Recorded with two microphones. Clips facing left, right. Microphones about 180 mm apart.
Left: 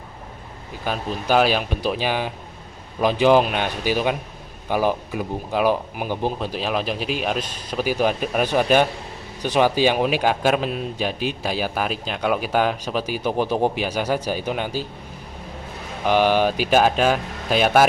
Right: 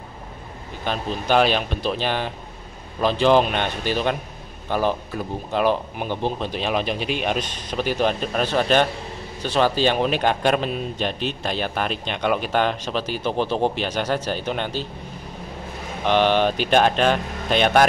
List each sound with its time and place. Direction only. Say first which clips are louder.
0.8 s speech: even; 5° left (ahead or behind)
16.1 s speech: left 1 dB; 10° left (ahead or behind)